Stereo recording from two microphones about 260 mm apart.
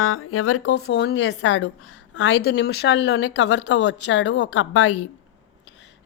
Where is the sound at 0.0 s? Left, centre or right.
Left.